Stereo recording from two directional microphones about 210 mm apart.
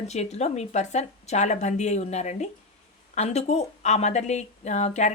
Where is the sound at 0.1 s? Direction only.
30° left (ahead or behind).